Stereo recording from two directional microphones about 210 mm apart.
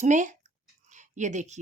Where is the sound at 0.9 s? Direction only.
35° right (ahead or behind).